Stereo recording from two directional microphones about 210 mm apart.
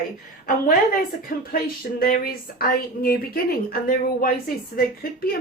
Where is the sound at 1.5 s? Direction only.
45° left (ahead or behind).